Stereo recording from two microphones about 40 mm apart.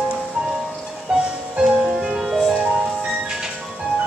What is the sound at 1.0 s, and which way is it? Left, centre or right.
Music, right.